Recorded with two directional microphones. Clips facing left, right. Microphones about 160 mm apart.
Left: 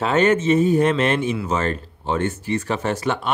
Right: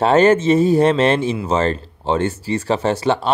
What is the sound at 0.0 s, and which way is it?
Speech, 35° right (ahead or behind).